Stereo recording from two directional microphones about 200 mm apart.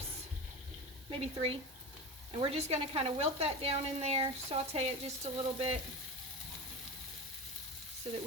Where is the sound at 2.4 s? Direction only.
30° right (ahead or behind).